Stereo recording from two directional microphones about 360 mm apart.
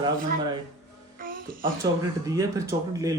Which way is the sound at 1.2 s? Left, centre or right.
Right.